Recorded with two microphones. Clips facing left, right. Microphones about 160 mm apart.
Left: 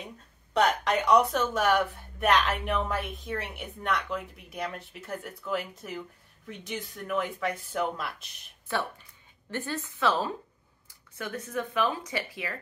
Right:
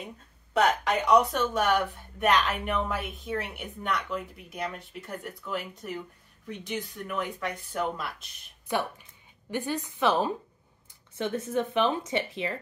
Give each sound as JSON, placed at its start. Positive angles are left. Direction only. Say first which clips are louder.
{"t": 0.5, "sound": "speech", "louder": "even", "side_deg": 0}
{"t": 8.6, "sound": "a woman's voice", "louder": "right 2 dB", "side_deg": -15}